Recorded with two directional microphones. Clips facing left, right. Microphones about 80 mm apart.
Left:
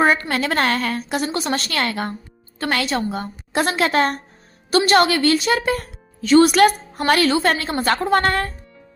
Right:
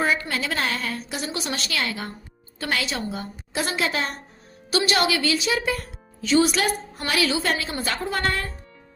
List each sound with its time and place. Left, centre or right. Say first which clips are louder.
0.0 s a woman's voice: left 6 dB; left
4.9 s a woman's voice: left 8 dB; left
7.0 s a woman's voice: left 8 dB; left